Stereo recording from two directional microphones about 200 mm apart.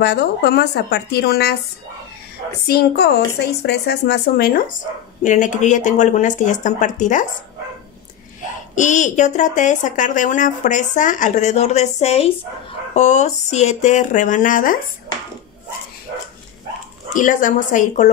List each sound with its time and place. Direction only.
0.0 s speech: 55° left (ahead or behind)
2.7 s speech: 55° left (ahead or behind)
8.7 s speech: 40° left (ahead or behind)
17.1 s speech: 40° left (ahead or behind)